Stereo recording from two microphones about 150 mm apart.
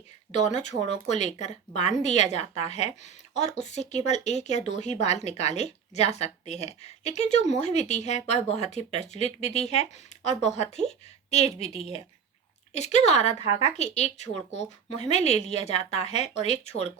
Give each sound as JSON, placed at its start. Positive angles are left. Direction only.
{"t": 0.3, "sound": "speech", "side_deg": 50}